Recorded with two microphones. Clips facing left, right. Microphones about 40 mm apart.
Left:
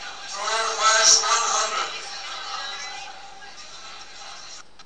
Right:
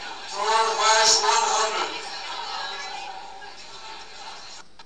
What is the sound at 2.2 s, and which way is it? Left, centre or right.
Music, left.